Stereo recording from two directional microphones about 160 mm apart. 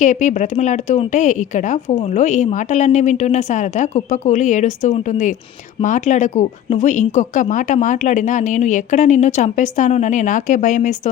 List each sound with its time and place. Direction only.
0.0 s speech: 50° left (ahead or behind)